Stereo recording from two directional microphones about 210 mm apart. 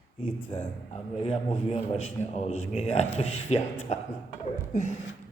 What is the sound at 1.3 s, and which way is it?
A man's voice, 30° left (ahead or behind).